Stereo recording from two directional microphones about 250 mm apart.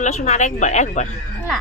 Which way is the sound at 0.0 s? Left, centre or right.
Left.